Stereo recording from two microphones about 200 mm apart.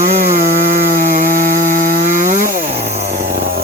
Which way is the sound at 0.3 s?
45° right (ahead or behind).